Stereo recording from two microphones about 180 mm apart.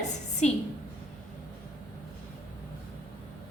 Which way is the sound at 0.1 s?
40° left (ahead or behind).